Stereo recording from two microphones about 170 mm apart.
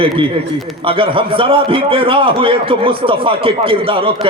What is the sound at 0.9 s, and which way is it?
A man's voice, 30° right (ahead or behind).